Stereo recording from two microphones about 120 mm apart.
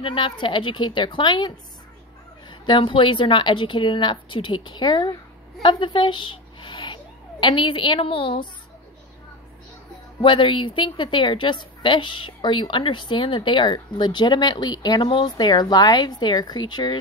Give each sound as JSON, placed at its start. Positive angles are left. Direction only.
{"t": 0.0, "sound": "a woman's voice", "side_deg": 45}
{"t": 2.6, "sound": "a woman's voice", "side_deg": 45}
{"t": 10.2, "sound": "a woman's voice", "side_deg": 45}